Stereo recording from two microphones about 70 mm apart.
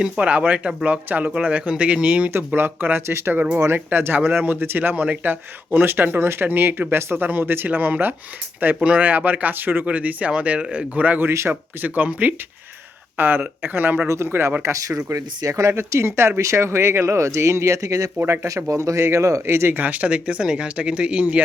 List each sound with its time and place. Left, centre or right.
0.0 s speech: centre
2.3 s speech: right
11.3 s speech: right
14.1 s speech: right
15.9 s speech: right; by 21.4 s centre